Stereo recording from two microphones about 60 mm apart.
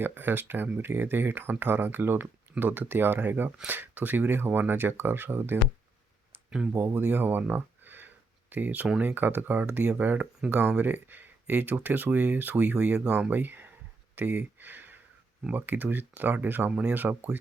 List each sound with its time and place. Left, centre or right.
0.0 s speech: right
6.7 s speech: right
7.5 s a sound: right
9.0 s speech: right
13.3 s speech: right